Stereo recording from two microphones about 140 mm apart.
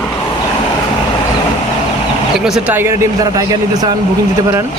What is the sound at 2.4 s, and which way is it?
Speech, 5° right (ahead or behind).